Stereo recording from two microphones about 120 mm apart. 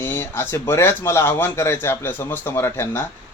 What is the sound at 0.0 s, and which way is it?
A man's voice, 20° left (ahead or behind).